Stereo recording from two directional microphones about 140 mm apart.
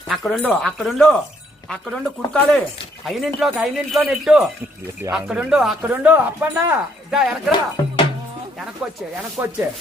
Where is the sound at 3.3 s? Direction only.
5° right (ahead or behind).